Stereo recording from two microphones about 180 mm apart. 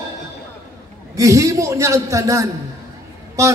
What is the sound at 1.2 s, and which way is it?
A man's voice, 15° right (ahead or behind).